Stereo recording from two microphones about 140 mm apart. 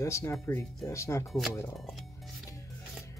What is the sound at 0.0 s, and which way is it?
Speech, 20° left (ahead or behind).